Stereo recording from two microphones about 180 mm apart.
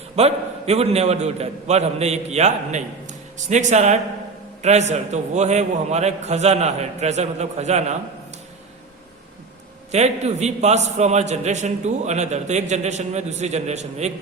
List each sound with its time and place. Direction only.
0.2 s a man's voice: 35° right (ahead or behind)
9.9 s a man's voice: 40° right (ahead or behind)